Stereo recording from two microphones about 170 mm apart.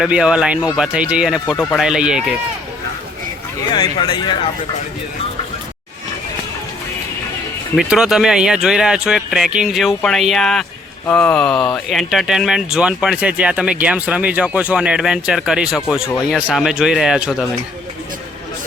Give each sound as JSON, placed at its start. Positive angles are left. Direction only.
{"t": 0.0, "sound": "speech", "side_deg": -5}
{"t": 3.7, "sound": "speech", "side_deg": 30}
{"t": 7.8, "sound": "speech", "side_deg": -5}